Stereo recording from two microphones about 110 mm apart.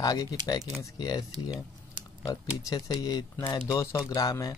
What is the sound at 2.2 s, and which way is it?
Speech, 40° left (ahead or behind).